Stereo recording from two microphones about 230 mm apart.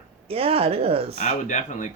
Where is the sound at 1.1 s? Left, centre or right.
Left.